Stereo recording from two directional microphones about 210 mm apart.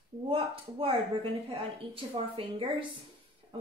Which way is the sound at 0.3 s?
25° right (ahead or behind).